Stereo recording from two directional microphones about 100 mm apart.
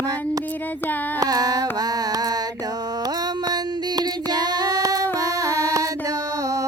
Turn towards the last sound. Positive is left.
turn(degrees=-35)  # may be behind; listen again after turning